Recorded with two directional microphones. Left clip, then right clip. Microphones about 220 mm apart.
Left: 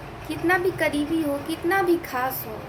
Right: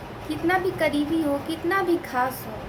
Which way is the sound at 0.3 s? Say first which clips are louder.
Left 1 dB; 10° right (ahead or behind).